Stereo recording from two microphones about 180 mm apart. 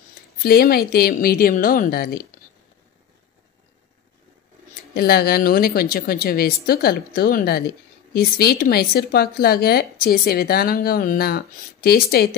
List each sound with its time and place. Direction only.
0.4 s speech: 55° left (ahead or behind)
4.9 s speech: 55° left (ahead or behind)